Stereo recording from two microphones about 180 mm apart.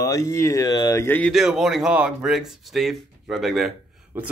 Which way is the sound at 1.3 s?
Centre (ahead or behind).